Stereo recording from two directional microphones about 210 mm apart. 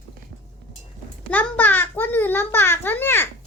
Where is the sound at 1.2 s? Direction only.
10° left (ahead or behind).